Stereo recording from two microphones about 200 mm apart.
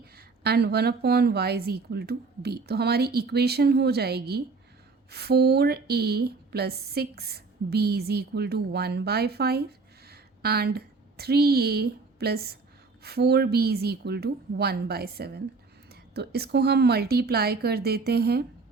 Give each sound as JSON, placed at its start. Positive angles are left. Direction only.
{"t": 0.0, "sound": "speech", "side_deg": -50}